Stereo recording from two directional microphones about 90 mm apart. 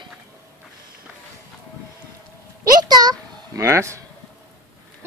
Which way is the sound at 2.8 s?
45° right (ahead or behind).